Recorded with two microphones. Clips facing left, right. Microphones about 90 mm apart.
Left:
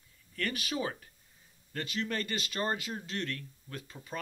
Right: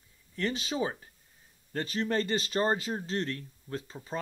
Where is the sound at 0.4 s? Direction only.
25° right (ahead or behind).